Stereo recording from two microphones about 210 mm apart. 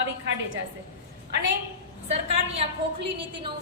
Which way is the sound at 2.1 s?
30° right (ahead or behind).